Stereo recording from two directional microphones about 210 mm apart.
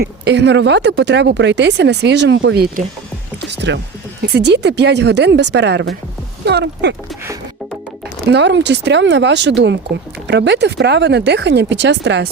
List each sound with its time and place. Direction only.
0.0 s speech: 55° right (ahead or behind)
3.5 s rowboat: 55° right (ahead or behind)
4.4 s speech: 55° right (ahead or behind)
8.3 s speech: 55° right (ahead or behind)